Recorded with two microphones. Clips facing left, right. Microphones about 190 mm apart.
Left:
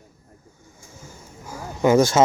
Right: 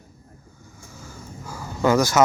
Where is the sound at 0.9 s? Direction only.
20° left (ahead or behind).